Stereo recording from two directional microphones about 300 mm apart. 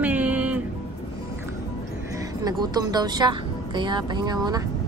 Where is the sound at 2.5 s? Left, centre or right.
Centre.